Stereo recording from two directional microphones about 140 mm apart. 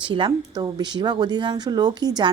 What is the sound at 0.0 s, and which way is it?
A woman's voice, 35° right (ahead or behind).